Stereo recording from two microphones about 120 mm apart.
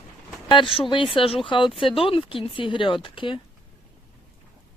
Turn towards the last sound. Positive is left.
turn(degrees=45)  # may be behind; listen again after turning